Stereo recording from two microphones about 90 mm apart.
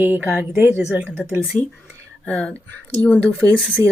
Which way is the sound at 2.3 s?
15° left (ahead or behind).